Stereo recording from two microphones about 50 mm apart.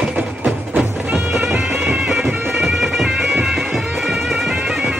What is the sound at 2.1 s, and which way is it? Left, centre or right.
Bagpipes, centre.